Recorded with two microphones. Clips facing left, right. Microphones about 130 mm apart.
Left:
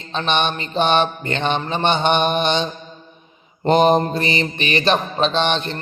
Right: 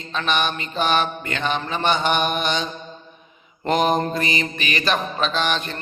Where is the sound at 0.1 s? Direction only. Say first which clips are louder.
Left 3 dB; 30° left (ahead or behind).